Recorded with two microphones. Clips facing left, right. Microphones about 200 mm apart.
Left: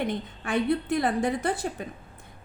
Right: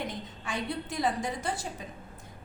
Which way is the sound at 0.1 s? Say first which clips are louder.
Left 8 dB; 60° left (ahead or behind).